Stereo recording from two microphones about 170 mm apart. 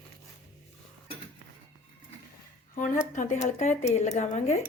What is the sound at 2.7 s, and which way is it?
Speech, 50° left (ahead or behind).